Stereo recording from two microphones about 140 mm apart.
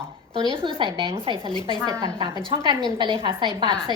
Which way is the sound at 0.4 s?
35° right (ahead or behind).